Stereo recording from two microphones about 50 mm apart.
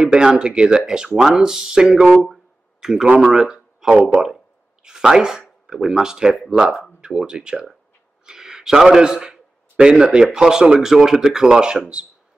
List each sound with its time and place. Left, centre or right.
0.0 s speech: centre
2.2 s a sound: centre
3.2 s a man's voice: centre